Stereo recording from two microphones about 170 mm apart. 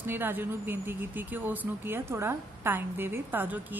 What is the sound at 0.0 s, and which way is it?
Speech, 10° right (ahead or behind).